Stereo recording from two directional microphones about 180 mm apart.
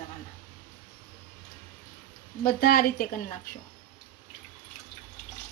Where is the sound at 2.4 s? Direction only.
55° left (ahead or behind).